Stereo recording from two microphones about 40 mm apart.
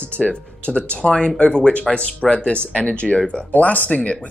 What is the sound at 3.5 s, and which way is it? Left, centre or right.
Speech, left.